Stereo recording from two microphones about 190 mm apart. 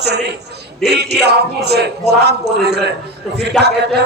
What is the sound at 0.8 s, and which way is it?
A man's voice, 60° right (ahead or behind).